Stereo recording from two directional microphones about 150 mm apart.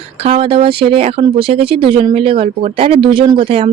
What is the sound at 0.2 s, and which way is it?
Speech, 40° right (ahead or behind).